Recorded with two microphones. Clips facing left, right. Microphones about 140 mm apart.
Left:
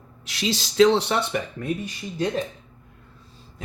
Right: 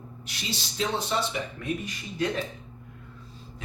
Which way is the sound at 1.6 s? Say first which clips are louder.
Left 4 dB; 45° left (ahead or behind).